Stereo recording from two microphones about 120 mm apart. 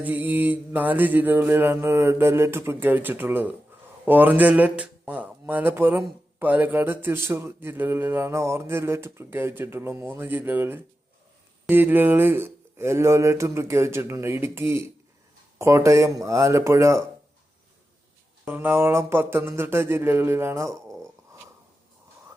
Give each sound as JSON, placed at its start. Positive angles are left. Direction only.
{"t": 0.0, "sound": "mantra", "side_deg": -15}
{"t": 6.4, "sound": "speech", "side_deg": -15}
{"t": 18.4, "sound": "speech", "side_deg": -15}